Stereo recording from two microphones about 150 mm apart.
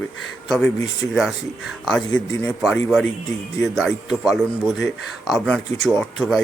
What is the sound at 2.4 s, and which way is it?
A man's voice, centre (ahead or behind).